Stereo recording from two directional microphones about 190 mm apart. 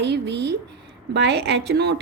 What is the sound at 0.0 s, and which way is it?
A woman's voice, 65° right (ahead or behind).